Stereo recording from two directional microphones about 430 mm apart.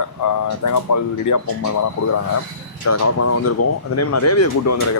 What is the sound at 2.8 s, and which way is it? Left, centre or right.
Speech, left.